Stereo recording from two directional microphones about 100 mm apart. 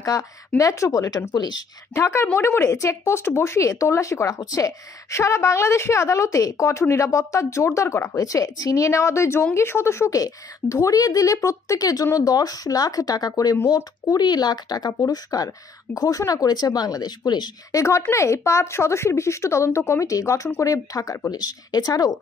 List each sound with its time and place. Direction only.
0.0 s a woman's voice: 35° left (ahead or behind)
1.3 s speech: 45° left (ahead or behind)
2.0 s a woman's voice: 30° left (ahead or behind)
17.7 s speech: 30° left (ahead or behind)